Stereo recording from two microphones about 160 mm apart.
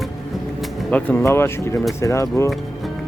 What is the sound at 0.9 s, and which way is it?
Speech, 10° left (ahead or behind).